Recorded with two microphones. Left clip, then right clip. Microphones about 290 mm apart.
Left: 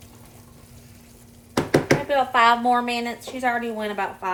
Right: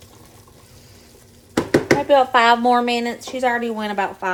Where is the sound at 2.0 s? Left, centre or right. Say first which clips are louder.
Right 5 dB; right.